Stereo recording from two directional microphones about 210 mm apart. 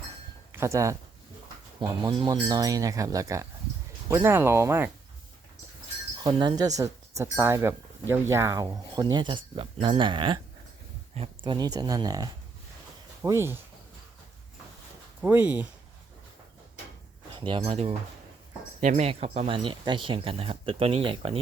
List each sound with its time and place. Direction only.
0.5 s speech: 15° right (ahead or behind)
6.2 s speech: 20° right (ahead or behind)
15.2 s speech: 10° right (ahead or behind)
17.3 s speech: 25° right (ahead or behind)